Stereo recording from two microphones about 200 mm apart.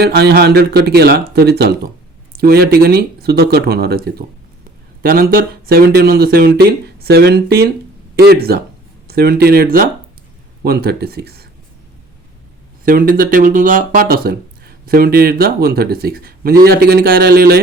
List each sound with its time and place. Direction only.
0.0 s speech: 55° right (ahead or behind)
12.8 s speech: 45° right (ahead or behind)